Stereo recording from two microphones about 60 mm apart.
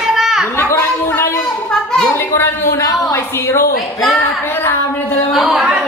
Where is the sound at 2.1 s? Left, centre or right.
Left.